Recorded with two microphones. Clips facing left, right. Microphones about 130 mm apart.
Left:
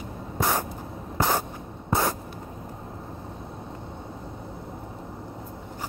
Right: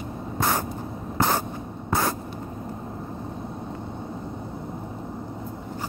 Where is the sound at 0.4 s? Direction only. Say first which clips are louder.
Right 1 dB; 10° left (ahead or behind).